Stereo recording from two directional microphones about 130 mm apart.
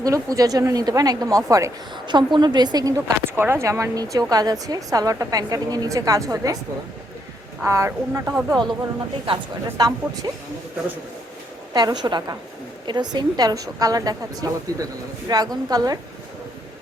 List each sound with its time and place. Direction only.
0.0 s speech: 25° right (ahead or behind)
7.6 s speech: 20° right (ahead or behind)
9.2 s speech: 35° right (ahead or behind)
11.7 s speech: 35° right (ahead or behind)